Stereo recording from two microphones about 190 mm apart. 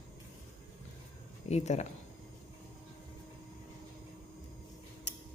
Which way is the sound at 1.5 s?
35° left (ahead or behind).